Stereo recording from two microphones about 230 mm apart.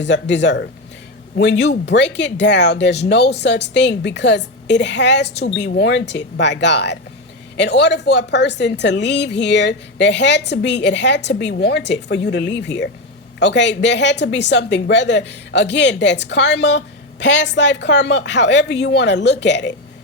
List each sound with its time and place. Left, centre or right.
0.0 s speech: left